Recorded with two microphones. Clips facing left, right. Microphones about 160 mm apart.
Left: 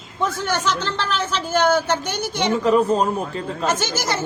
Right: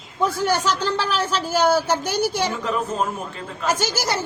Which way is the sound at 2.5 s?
35° left (ahead or behind).